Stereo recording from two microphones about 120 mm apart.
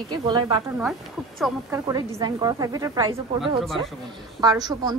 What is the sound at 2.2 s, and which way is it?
Speech, 30° right (ahead or behind).